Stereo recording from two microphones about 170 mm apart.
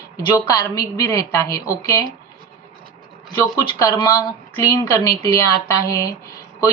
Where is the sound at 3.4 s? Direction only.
20° left (ahead or behind).